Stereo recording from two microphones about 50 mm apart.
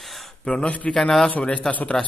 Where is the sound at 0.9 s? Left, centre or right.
Centre.